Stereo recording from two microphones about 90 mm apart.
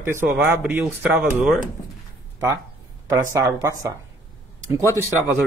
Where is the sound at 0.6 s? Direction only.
15° right (ahead or behind).